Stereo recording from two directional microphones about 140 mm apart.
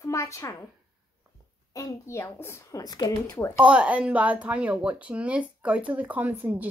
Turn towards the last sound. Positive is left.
turn(degrees=-15)  # may be behind; listen again after turning